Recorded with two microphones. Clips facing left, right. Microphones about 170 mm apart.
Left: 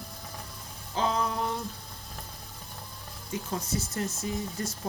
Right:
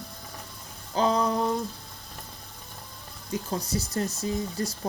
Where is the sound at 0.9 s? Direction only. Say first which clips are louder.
Right 5 dB; 40° right (ahead or behind).